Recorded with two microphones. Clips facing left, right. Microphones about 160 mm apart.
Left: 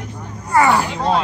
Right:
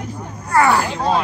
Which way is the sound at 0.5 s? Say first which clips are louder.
Even; 10° left (ahead or behind).